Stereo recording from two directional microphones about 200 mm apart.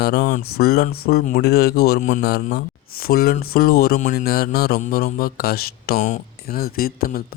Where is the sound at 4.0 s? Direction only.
40° left (ahead or behind).